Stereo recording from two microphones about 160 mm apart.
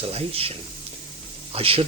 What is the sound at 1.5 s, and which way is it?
Speech, 35° right (ahead or behind).